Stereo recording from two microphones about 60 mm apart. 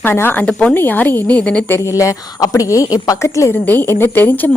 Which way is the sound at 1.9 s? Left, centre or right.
Left.